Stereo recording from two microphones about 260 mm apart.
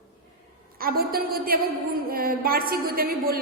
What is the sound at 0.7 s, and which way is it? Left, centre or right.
A woman's voice, right.